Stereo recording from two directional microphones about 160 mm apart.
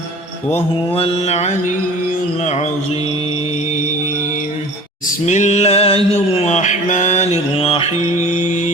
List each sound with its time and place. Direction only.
0.5 s mantra: 35° left (ahead or behind)
5.2 s a sound: 45° left (ahead or behind)
6.3 s music: 45° left (ahead or behind)